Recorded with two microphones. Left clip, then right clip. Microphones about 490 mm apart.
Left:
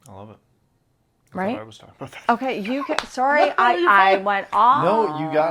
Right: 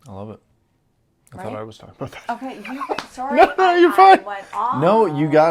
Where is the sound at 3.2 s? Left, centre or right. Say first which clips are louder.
Left 10 dB; left.